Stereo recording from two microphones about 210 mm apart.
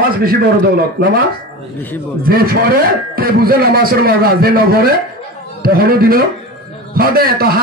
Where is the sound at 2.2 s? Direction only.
45° right (ahead or behind).